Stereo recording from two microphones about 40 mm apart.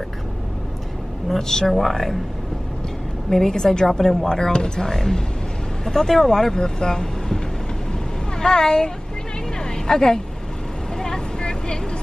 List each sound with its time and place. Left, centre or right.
1.5 s speech: centre
3.3 s speech: centre
8.4 s speech: centre
9.6 s vehicle: centre